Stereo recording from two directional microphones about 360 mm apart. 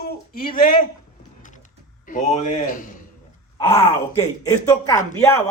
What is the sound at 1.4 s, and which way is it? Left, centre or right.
Typing, left.